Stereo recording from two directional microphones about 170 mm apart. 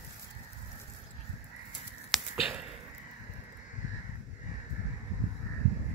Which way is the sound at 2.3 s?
5° right (ahead or behind).